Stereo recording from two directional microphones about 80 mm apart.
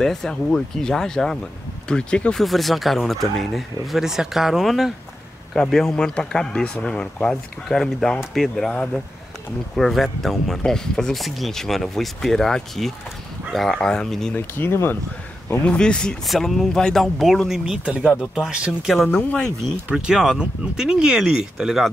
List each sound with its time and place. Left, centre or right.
0.0 s speech: centre
2.3 s speech: centre
9.8 s speech: centre
14.3 s speech: left
15.5 s speech: centre
16.3 s speech: centre
19.0 s speech: centre
19.9 s speech: centre